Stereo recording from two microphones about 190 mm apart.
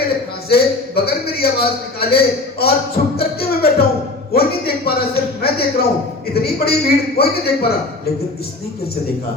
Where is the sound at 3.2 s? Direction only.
55° left (ahead or behind).